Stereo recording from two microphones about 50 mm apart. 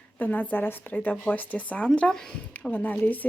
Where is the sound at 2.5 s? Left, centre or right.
Left.